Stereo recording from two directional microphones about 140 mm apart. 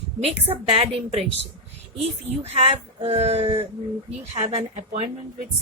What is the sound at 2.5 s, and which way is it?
A woman's voice, 45° right (ahead or behind).